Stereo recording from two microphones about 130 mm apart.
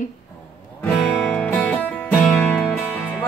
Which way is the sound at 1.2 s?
10° left (ahead or behind).